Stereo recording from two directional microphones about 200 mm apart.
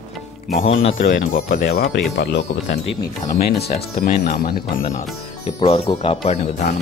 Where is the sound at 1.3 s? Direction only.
40° left (ahead or behind).